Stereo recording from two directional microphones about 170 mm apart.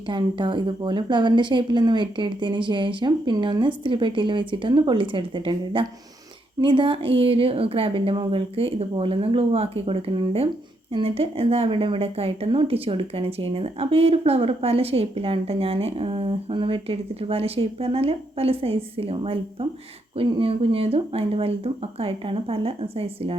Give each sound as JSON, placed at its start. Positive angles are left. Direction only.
{"t": 0.1, "sound": "a woman's voice", "side_deg": -30}